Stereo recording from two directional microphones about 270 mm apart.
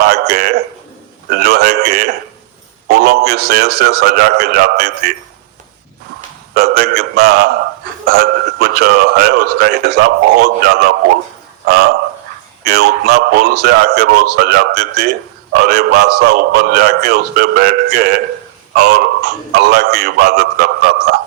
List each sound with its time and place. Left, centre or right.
0.0 s a sound: right
2.8 s a man's voice: right
6.5 s speech: right